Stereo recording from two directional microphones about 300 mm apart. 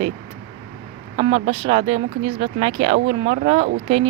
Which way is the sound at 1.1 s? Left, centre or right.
Centre.